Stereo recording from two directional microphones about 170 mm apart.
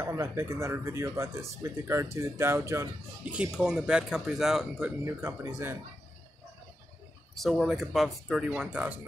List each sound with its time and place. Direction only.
0.0 s speech: 15° right (ahead or behind)
3.3 s speech: 5° right (ahead or behind)
7.3 s speech: centre (ahead or behind)